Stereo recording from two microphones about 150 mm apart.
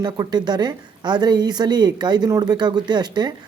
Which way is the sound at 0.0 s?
30° right (ahead or behind).